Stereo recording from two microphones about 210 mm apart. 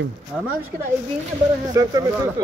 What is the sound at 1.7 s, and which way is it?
Speech, 20° right (ahead or behind).